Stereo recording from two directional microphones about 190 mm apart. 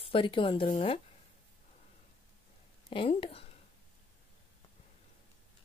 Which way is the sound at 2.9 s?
25° left (ahead or behind).